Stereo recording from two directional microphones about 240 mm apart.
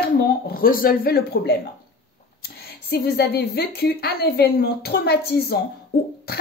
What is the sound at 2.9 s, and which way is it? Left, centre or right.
A woman's voice, left.